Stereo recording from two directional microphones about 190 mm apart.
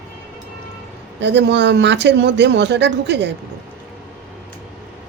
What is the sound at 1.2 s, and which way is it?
Speech, 65° right (ahead or behind).